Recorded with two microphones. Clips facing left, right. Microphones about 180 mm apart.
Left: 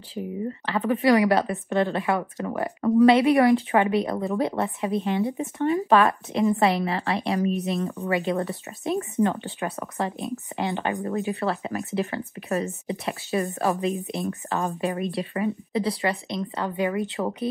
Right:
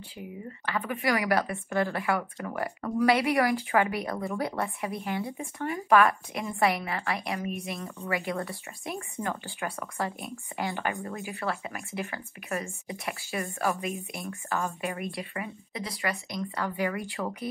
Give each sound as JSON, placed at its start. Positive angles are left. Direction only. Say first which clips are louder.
{"t": 0.1, "sound": "speech", "louder": "left 12 dB", "side_deg": 30}
{"t": 11.0, "sound": "speech", "louder": "left 9 dB", "side_deg": 35}